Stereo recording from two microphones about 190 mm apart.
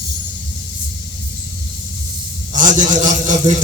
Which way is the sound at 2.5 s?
45° right (ahead or behind).